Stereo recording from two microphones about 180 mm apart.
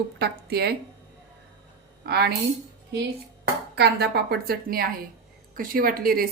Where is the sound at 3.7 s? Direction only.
65° right (ahead or behind).